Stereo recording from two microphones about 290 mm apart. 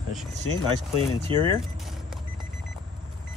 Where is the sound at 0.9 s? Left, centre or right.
Centre.